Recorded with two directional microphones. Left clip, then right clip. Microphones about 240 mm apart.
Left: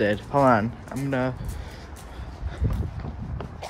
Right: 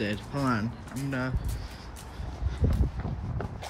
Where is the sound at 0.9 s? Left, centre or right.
Left.